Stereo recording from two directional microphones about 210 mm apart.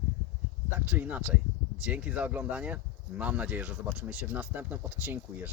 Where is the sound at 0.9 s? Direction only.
5° right (ahead or behind).